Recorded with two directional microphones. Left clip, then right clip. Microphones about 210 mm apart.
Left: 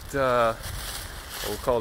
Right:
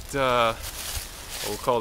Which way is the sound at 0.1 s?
Centre (ahead or behind).